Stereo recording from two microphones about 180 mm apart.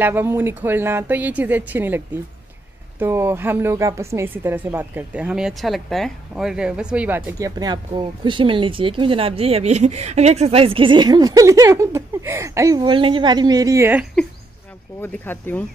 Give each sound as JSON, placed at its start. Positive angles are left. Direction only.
{"t": 0.0, "sound": "speech", "side_deg": -10}
{"t": 15.0, "sound": "speech", "side_deg": 10}